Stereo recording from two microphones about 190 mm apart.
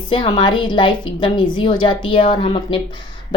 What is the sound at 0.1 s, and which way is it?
Speech, 25° left (ahead or behind).